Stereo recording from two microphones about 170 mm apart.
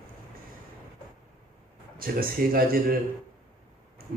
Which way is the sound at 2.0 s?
60° right (ahead or behind).